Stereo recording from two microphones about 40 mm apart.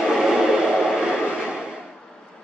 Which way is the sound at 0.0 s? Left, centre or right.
Centre.